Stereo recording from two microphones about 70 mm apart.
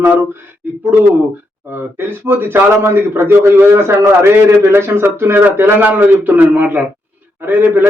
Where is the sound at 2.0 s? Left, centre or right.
Right.